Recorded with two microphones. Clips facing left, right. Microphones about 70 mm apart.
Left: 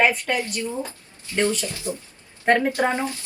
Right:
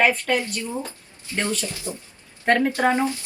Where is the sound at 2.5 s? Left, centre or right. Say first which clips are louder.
Left 1 dB; centre.